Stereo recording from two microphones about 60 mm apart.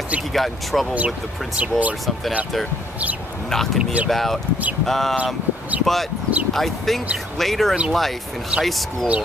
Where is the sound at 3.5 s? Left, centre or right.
Centre.